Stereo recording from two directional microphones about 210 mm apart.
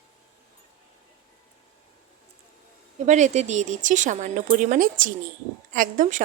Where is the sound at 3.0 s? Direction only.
35° right (ahead or behind).